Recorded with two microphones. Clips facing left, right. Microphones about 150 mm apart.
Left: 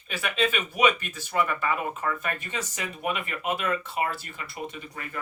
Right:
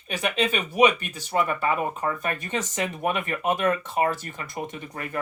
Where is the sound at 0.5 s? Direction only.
35° right (ahead or behind); by 5.2 s 55° right (ahead or behind).